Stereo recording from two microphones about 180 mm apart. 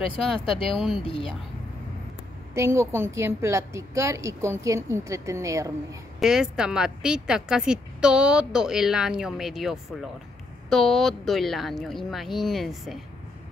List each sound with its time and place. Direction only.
0.2 s a woman's voice: centre (ahead or behind)
1.0 s a woman's voice: 30° left (ahead or behind)
2.5 s a woman's voice: 15° right (ahead or behind)
6.1 s a woman's voice: 5° right (ahead or behind)